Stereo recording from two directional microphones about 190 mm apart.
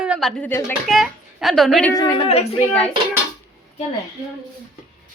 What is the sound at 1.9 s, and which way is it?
Speech, 20° left (ahead or behind).